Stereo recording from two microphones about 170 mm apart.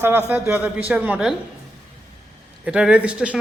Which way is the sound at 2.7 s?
5° right (ahead or behind).